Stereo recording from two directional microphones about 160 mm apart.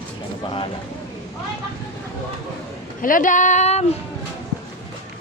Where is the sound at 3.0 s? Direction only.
60° left (ahead or behind).